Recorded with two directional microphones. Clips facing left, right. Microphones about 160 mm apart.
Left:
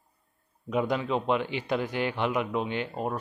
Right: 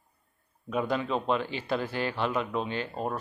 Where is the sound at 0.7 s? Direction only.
15° left (ahead or behind).